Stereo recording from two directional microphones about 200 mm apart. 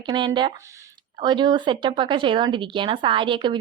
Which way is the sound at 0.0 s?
25° right (ahead or behind).